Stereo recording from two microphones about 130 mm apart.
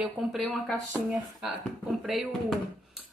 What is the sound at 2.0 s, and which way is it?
Speech, centre (ahead or behind).